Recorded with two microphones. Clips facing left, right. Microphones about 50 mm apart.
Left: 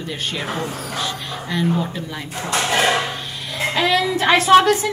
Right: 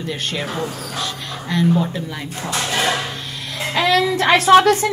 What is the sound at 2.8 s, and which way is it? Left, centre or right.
Hammer, centre.